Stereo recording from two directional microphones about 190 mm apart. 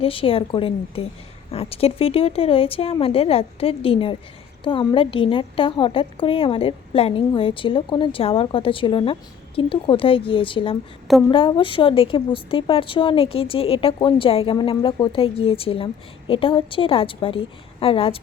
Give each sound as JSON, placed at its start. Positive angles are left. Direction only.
{"t": 0.0, "sound": "a woman's voice", "side_deg": 30}